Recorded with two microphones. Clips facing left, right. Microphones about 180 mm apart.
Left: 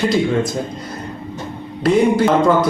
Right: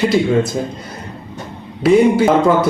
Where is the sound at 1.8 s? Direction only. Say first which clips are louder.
Right 3 dB; 5° right (ahead or behind).